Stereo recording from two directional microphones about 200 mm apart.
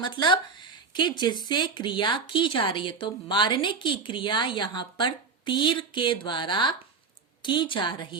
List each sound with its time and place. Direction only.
0.0 s speech: 20° left (ahead or behind)